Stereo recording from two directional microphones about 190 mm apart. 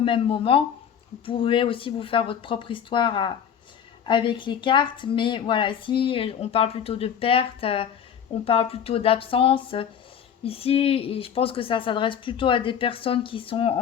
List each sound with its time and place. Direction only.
0.0 s a woman's voice: 30° left (ahead or behind)